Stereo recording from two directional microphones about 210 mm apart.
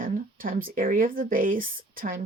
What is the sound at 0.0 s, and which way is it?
Speech, 40° right (ahead or behind).